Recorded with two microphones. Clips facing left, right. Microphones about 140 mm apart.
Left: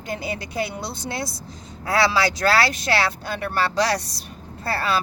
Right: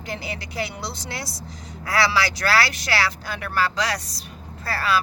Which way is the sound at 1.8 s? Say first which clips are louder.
Left 2 dB; 25° left (ahead or behind).